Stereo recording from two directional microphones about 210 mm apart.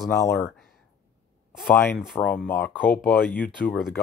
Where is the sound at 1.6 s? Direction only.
10° left (ahead or behind).